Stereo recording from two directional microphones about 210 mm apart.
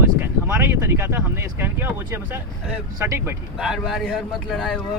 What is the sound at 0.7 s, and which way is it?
A man's voice, 10° right (ahead or behind).